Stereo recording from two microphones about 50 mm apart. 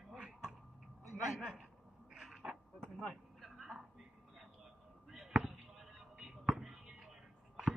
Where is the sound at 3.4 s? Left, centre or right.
Centre.